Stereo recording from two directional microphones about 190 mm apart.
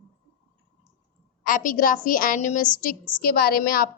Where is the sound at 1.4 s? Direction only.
45° left (ahead or behind).